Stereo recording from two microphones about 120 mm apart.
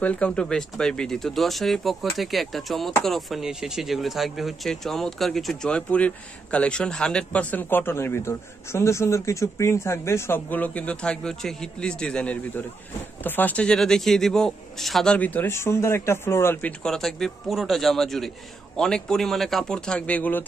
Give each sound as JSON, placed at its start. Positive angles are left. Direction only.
{"t": 0.0, "sound": "speech", "side_deg": 10}
{"t": 15.1, "sound": "speech", "side_deg": 15}
{"t": 16.8, "sound": "speech", "side_deg": 5}